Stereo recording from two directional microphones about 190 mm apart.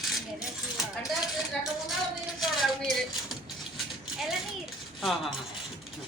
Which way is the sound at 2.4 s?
Centre (ahead or behind).